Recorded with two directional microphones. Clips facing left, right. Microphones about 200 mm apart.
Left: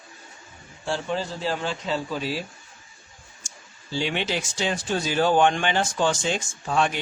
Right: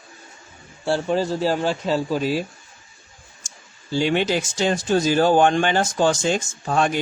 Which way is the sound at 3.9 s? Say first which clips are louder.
Right 6 dB; 45° right (ahead or behind).